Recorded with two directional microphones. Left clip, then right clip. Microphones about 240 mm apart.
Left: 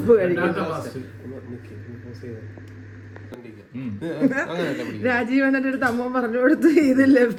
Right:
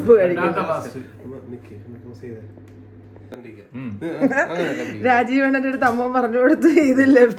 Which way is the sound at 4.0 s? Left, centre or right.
Left.